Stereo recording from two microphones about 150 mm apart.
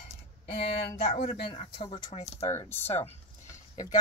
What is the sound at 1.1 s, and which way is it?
Speech, 35° left (ahead or behind).